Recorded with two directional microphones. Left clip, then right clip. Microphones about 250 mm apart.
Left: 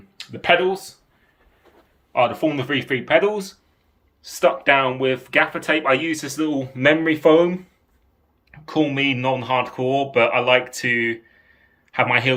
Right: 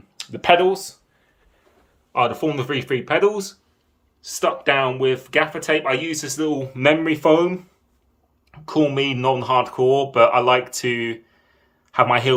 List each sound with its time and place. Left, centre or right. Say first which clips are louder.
0.2 s speech: right 2 dB; centre
2.1 s speech: left 1 dB; centre
2.6 s speech: even; right
4.2 s a man's voice: left 3 dB; centre